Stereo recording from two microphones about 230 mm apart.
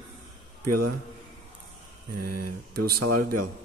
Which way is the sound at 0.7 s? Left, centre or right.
Right.